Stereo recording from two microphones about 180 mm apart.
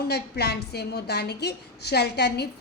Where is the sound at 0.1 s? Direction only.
65° left (ahead or behind).